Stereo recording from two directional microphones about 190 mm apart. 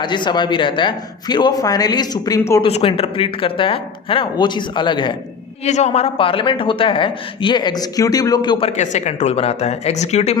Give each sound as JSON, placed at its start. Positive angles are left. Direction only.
{"t": 0.0, "sound": "speech", "side_deg": 25}
{"t": 2.6, "sound": "speech", "side_deg": 30}
{"t": 5.6, "sound": "speech", "side_deg": 35}